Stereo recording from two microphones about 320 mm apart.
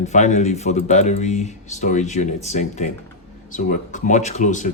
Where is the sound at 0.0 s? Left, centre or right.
Left.